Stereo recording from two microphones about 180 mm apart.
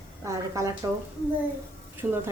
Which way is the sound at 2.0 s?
10° right (ahead or behind).